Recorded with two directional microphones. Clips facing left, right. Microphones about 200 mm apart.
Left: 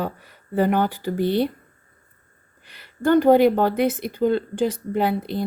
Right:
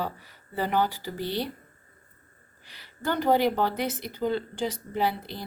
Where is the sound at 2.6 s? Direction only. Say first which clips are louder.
Left 10 dB; 55° left (ahead or behind).